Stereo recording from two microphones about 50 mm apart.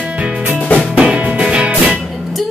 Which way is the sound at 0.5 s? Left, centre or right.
Left.